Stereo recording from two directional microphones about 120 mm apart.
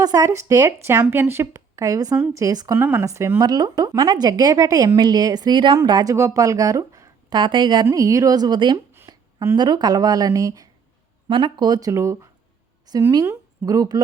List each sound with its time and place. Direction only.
0.0 s speech: 30° right (ahead or behind)
2.7 s speech: 20° right (ahead or behind); by 7.9 s 40° right (ahead or behind)
7.9 s speech: 30° right (ahead or behind)
9.0 s a sound: 25° right (ahead or behind)
9.6 s speech: 35° right (ahead or behind)
11.3 s a woman's voice: 40° right (ahead or behind)